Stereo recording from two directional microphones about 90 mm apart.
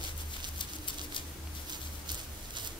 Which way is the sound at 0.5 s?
65° left (ahead or behind).